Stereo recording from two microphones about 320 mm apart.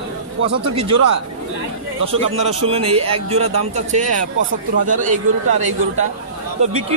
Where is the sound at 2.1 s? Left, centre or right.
Centre.